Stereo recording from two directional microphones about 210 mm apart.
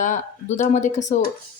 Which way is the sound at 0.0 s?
35° left (ahead or behind).